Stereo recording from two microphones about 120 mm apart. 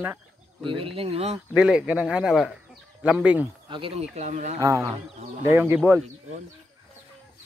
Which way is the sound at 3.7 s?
45° right (ahead or behind).